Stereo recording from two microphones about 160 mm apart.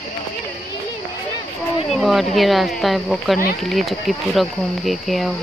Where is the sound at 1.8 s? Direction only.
Centre (ahead or behind).